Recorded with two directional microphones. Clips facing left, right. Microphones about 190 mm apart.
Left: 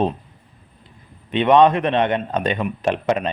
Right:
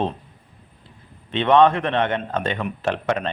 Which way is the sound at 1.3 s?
15° left (ahead or behind).